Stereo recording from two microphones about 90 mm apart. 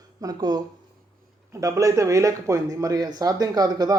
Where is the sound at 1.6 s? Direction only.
35° right (ahead or behind).